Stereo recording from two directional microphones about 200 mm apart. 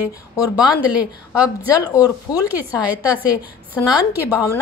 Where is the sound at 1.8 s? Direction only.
20° left (ahead or behind).